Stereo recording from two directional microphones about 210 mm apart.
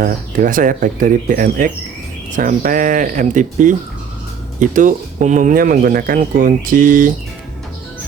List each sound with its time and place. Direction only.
0.0 s speech: 40° right (ahead or behind)